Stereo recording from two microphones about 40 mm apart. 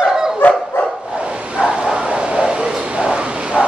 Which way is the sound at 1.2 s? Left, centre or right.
Right.